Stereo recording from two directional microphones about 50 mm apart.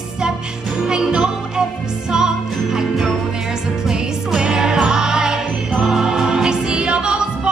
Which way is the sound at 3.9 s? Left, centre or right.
Centre.